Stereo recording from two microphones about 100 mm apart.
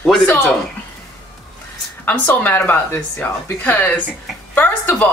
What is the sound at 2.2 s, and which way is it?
Speech, 20° left (ahead or behind).